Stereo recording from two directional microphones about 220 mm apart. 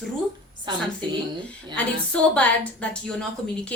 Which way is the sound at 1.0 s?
20° right (ahead or behind).